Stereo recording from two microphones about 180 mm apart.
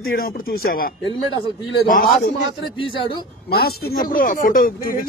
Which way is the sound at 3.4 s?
60° left (ahead or behind).